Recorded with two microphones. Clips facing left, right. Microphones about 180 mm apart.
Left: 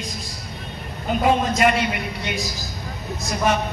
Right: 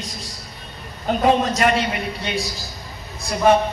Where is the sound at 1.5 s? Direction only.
35° right (ahead or behind).